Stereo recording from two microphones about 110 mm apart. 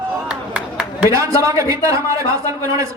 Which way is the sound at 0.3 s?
10° right (ahead or behind).